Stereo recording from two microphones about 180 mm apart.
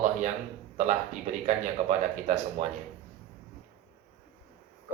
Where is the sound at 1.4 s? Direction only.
40° right (ahead or behind).